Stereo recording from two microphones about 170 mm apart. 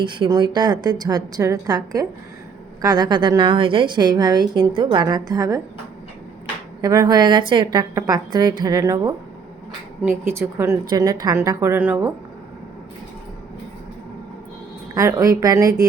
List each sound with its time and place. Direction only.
0.0 s a woman's voice: 25° right (ahead or behind)
6.8 s a woman's voice: 20° right (ahead or behind)
10.3 s a woman's voice: 15° right (ahead or behind)
14.9 s a woman's voice: 20° right (ahead or behind)